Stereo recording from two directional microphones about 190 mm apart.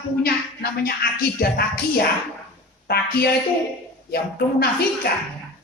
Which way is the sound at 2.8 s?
55° left (ahead or behind).